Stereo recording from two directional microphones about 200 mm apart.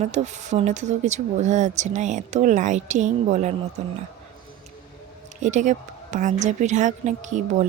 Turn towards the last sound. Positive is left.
turn(degrees=-35)  # may be behind; listen again after turning